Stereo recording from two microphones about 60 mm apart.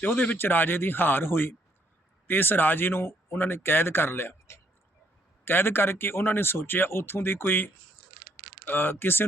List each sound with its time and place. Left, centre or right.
0.0 s speech: left